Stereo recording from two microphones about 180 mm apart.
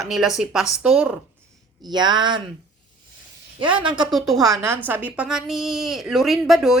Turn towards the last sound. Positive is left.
turn(degrees=0)  # may be behind; listen again after turning